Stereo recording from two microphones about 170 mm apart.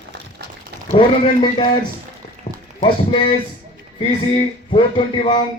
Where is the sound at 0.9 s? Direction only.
30° left (ahead or behind).